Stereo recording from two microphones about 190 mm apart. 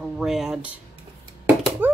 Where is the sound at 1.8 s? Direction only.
10° right (ahead or behind).